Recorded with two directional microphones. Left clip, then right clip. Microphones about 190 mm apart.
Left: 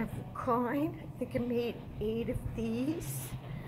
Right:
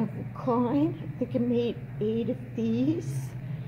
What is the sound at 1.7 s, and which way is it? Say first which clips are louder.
Speech: right 6 dB; 40° left (ahead or behind).